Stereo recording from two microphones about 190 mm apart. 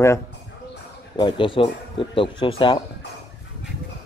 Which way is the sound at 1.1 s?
25° left (ahead or behind).